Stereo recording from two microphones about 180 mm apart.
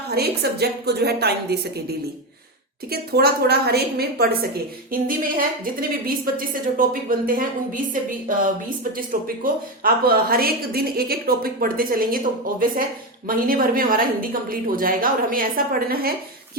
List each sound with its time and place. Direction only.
0.1 s a woman's voice: 60° right (ahead or behind)
8.8 s a woman's voice: 50° right (ahead or behind)